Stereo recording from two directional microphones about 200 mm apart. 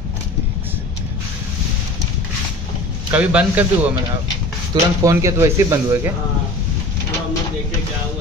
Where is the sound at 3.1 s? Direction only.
5° right (ahead or behind).